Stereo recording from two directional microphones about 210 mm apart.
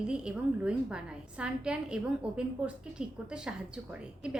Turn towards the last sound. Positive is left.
turn(degrees=-5)  # may be behind; listen again after turning